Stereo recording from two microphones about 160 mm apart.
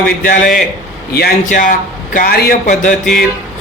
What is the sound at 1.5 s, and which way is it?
A man's voice, 55° left (ahead or behind).